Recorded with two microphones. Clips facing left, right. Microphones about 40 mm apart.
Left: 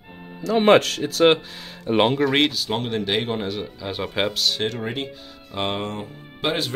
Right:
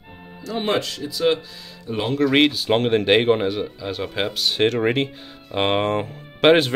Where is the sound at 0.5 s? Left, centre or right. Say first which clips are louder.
Left 7 dB; left.